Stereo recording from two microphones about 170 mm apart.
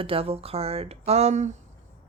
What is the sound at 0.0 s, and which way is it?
Speech, 35° right (ahead or behind).